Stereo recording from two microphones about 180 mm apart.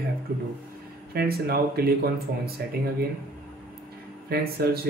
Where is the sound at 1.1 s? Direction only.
60° right (ahead or behind).